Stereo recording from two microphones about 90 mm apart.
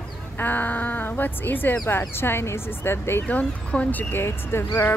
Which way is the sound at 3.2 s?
15° left (ahead or behind).